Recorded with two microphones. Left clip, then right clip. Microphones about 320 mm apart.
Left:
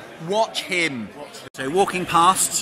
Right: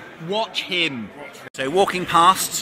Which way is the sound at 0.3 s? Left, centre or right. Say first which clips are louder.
Left 2 dB; centre.